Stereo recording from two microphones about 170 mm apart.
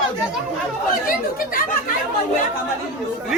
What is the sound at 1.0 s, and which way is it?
Speech, 55° left (ahead or behind).